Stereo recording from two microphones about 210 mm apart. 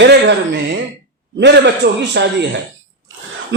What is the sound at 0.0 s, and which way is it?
A man's voice, 55° right (ahead or behind).